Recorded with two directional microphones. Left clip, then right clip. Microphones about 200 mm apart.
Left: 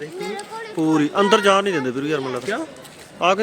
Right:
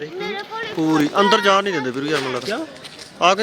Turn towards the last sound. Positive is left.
turn(degrees=-5)  # may be behind; listen again after turning